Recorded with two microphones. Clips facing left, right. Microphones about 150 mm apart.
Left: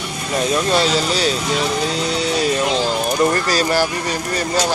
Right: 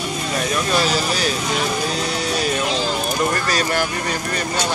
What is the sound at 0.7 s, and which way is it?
Speech, 25° left (ahead or behind).